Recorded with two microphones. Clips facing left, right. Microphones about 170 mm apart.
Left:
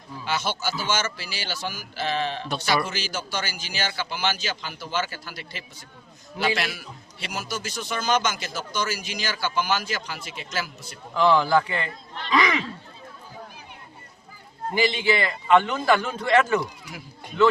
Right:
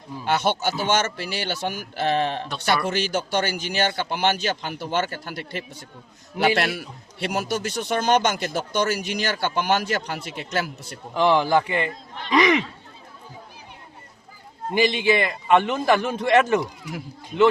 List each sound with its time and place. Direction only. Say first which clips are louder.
0.3 s a man's voice: right 5 dB; 60° right (ahead or behind)
11.1 s a man's voice: right 1 dB; 20° right (ahead or behind)
14.7 s a man's voice: right 3 dB; 20° right (ahead or behind)